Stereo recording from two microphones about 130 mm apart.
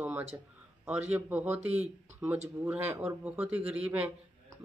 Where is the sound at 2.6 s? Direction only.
15° right (ahead or behind).